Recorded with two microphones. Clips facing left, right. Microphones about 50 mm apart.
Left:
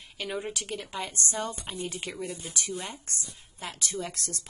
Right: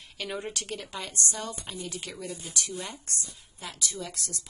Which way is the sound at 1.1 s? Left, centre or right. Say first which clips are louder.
Even; left.